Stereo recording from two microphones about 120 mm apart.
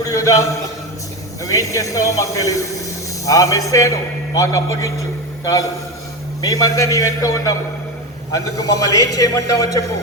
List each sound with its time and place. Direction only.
0.0 s a man's voice: 30° left (ahead or behind)
1.5 s a man's voice: 30° left (ahead or behind)
6.4 s a man's voice: 30° left (ahead or behind)